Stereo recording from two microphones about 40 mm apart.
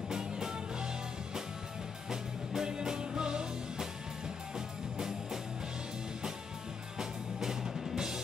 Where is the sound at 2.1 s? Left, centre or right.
Centre.